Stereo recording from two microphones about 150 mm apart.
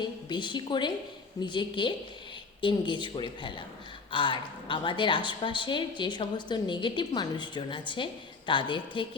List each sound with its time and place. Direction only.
0.0 s a woman's voice: 30° left (ahead or behind)